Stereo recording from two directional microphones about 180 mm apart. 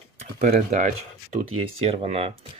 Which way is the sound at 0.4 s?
45° right (ahead or behind).